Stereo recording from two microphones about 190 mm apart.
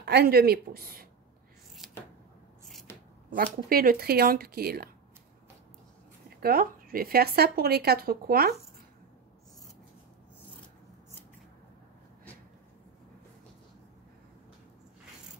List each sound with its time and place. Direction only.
0.0 s speech: 55° right (ahead or behind)
3.3 s speech: 50° right (ahead or behind)
6.4 s speech: 50° right (ahead or behind)